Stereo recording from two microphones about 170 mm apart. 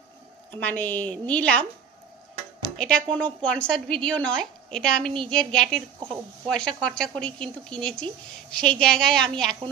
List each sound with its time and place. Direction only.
0.6 s a woman's voice: 10° left (ahead or behind)
2.8 s a woman's voice: 5° left (ahead or behind)